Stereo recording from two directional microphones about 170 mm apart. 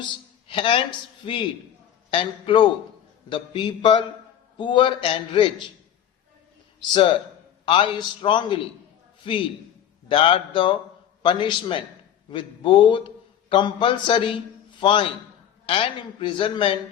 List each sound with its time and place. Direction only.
0.4 s a man's voice: 30° left (ahead or behind)
6.9 s a man's voice: 30° left (ahead or behind)